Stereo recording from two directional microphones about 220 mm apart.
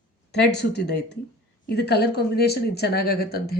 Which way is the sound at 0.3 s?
50° left (ahead or behind).